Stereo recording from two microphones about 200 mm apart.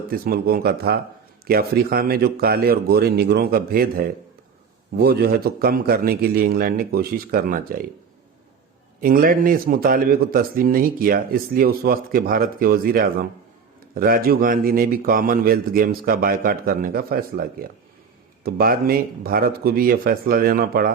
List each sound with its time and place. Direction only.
0.1 s speech: 50° right (ahead or behind)
9.0 s speech: 45° right (ahead or behind)